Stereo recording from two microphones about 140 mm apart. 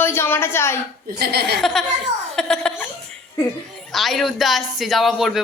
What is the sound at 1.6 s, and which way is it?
Speech, centre (ahead or behind).